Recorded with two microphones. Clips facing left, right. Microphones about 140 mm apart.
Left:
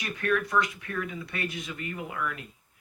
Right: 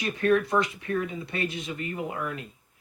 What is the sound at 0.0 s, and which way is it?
Speech, 30° right (ahead or behind).